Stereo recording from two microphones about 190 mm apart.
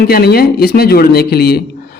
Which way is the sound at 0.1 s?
55° left (ahead or behind).